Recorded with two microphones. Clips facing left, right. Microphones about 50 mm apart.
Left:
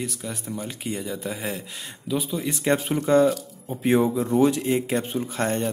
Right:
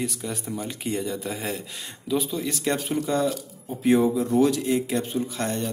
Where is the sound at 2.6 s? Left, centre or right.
Left.